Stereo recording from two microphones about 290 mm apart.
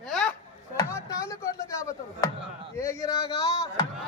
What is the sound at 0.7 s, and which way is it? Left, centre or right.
Speech, centre.